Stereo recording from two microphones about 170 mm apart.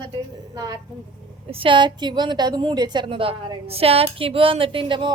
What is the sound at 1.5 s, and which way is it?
A woman's voice, 30° right (ahead or behind).